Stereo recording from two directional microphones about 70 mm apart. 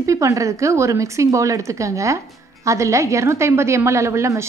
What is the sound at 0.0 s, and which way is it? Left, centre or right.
A woman's voice, right.